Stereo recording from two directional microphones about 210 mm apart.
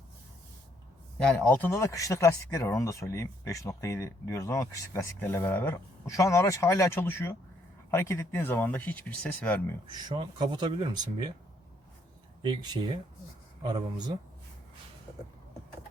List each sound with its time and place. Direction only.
1.2 s speech: 5° left (ahead or behind)
9.9 s speech: 20° right (ahead or behind)
12.4 s speech: 20° right (ahead or behind)